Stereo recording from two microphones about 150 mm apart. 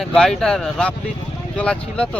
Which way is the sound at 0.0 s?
5° left (ahead or behind).